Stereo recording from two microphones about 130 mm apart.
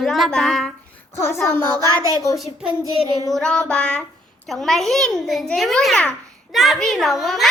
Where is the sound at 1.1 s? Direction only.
20° left (ahead or behind).